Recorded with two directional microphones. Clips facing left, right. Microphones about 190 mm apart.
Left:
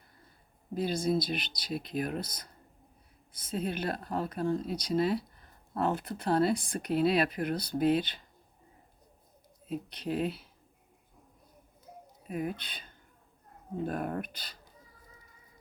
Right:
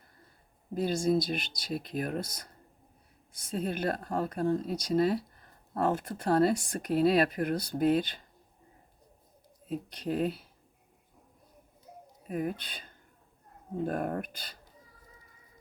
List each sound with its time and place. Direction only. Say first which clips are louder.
0.7 s speech: right 2 dB; 45° right (ahead or behind)
9.9 s speech: right 2 dB; 45° right (ahead or behind)
12.3 s speech: right 2 dB; 45° right (ahead or behind)